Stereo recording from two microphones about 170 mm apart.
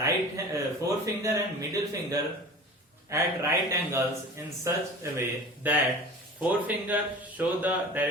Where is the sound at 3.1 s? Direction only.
15° right (ahead or behind).